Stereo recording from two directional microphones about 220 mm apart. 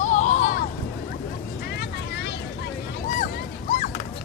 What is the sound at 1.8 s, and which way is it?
Vehicle, 50° left (ahead or behind).